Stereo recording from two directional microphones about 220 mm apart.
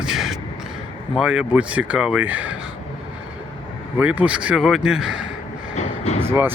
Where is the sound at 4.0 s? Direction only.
5° right (ahead or behind).